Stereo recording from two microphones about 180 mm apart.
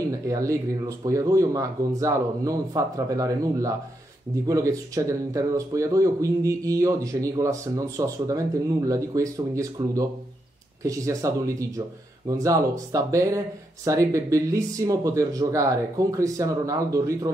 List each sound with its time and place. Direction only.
0.3 s speech: 20° right (ahead or behind)